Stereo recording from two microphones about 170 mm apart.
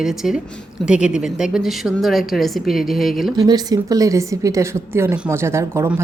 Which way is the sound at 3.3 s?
20° right (ahead or behind).